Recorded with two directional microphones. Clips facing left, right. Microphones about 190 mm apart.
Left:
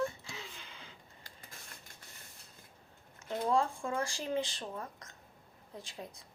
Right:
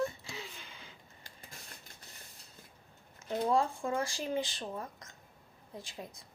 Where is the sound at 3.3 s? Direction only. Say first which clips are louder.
Right 1 dB; 20° right (ahead or behind).